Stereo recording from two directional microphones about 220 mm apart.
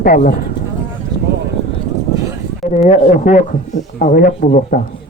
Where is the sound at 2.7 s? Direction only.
35° left (ahead or behind).